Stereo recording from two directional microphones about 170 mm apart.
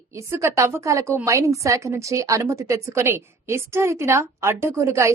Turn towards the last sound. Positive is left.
turn(degrees=-15)  # may be behind; listen again after turning